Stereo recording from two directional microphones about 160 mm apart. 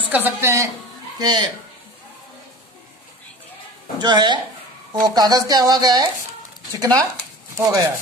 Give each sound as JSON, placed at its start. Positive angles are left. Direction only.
{"t": 0.1, "sound": "a woman's voice", "side_deg": -15}
{"t": 1.1, "sound": "speech", "side_deg": -25}
{"t": 4.0, "sound": "speech", "side_deg": -30}